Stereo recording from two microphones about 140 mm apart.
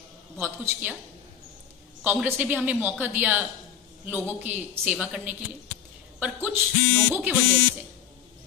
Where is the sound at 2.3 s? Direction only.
10° right (ahead or behind).